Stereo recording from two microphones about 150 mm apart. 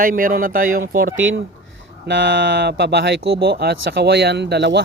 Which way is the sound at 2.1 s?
90° right.